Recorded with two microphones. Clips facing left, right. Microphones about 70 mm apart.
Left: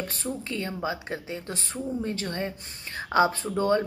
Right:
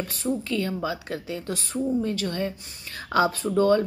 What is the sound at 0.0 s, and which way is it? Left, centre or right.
Speech, left.